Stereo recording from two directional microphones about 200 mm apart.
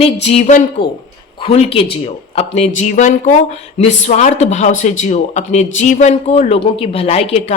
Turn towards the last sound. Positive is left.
turn(degrees=30)  # may be behind; listen again after turning